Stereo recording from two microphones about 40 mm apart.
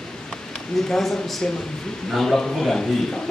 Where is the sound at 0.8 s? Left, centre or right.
Centre.